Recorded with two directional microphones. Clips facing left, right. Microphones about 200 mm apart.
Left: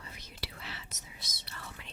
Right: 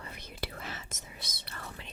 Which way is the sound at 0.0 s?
55° right (ahead or behind).